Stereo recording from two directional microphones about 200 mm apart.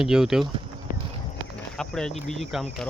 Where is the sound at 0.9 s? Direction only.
45° left (ahead or behind).